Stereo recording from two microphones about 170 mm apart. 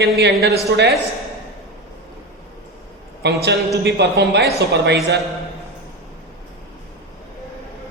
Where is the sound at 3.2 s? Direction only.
80° right.